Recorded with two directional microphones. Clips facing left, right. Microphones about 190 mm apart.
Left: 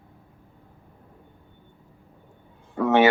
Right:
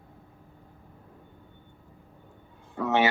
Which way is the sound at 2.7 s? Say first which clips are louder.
Left 6 dB; 55° left (ahead or behind).